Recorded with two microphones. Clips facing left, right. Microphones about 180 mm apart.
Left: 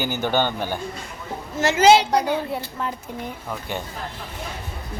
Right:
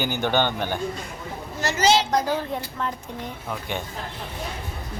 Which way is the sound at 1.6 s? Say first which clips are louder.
Left 6 dB; 55° left (ahead or behind).